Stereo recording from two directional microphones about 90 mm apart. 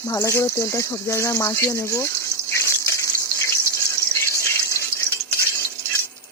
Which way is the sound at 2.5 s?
30° left (ahead or behind).